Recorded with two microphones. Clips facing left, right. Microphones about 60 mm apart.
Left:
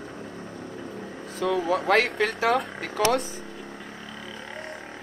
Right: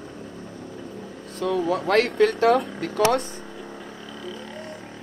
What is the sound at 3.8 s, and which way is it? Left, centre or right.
Vehicle, centre.